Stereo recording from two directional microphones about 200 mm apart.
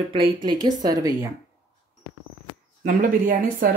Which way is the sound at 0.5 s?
20° right (ahead or behind).